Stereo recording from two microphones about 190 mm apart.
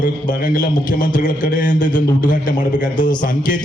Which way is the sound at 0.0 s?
45° left (ahead or behind).